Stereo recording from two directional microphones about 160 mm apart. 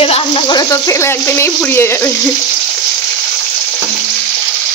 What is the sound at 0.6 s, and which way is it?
Speech, 20° left (ahead or behind).